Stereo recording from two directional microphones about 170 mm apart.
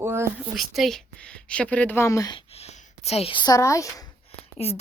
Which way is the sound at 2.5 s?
40° left (ahead or behind).